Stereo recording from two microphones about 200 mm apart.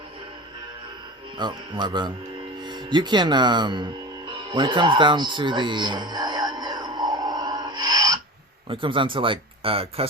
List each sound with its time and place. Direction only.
1.4 s speech: 20° right (ahead or behind)
4.3 s music: 25° right (ahead or behind)
8.7 s speech: 25° right (ahead or behind)